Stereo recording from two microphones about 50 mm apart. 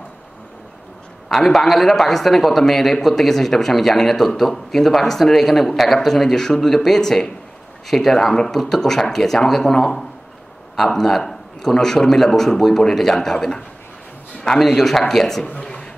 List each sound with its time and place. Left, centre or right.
1.3 s a man's voice: centre
14.6 s speech: centre
15.5 s a sound: centre